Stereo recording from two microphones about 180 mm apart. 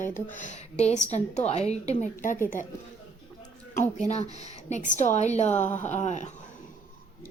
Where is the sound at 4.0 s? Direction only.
40° left (ahead or behind).